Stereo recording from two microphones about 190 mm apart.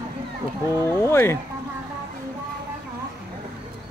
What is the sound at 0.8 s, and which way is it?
Speech, 15° left (ahead or behind).